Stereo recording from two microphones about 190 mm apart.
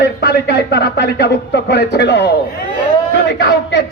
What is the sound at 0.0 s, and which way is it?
Speech, 60° left (ahead or behind).